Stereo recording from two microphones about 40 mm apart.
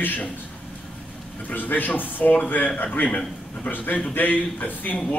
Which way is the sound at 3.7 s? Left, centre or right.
Left.